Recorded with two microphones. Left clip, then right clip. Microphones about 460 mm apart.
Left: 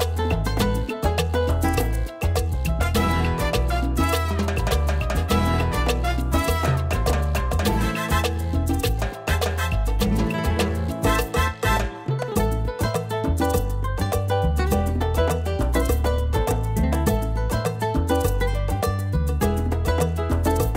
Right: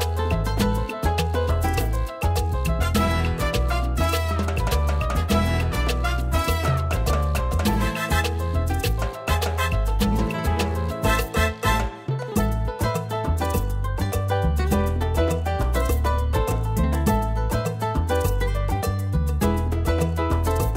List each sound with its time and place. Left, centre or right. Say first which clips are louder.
0.6 s music: left 1 dB; left
2.9 s music: left 2 dB; left
5.3 s music: left 3 dB; left
7.6 s music: even; left
9.9 s music: left 4 dB; left
14.3 s music: even; left